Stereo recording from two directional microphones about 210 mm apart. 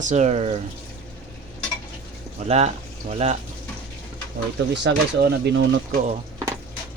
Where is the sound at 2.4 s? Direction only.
30° right (ahead or behind).